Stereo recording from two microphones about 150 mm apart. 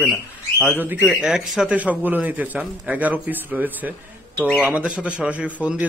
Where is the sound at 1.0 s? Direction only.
5° right (ahead or behind).